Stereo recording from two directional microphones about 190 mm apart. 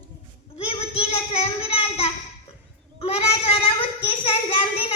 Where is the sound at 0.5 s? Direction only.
30° left (ahead or behind).